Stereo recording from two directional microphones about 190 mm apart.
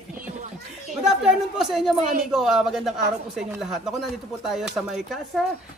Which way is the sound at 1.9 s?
40° right (ahead or behind).